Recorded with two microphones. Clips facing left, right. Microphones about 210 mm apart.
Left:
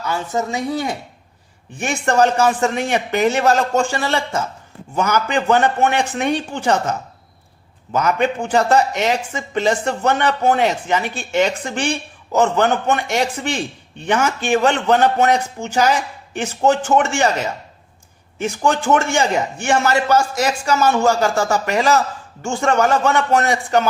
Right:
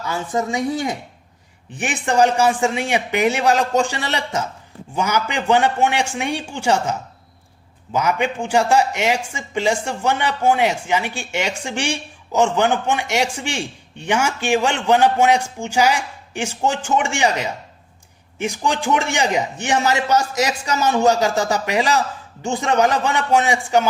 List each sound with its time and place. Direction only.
1.8 s a man's voice: 15° right (ahead or behind)
7.9 s a man's voice: 10° right (ahead or behind)